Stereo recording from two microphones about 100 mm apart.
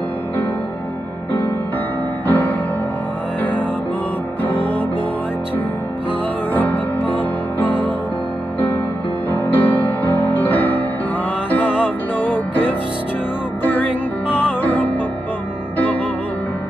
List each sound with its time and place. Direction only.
2.2 s music: 15° left (ahead or behind)
4.4 s music: 20° left (ahead or behind)
6.5 s music: 15° left (ahead or behind)
9.3 s music: 15° left (ahead or behind)
14.3 s music: 20° left (ahead or behind)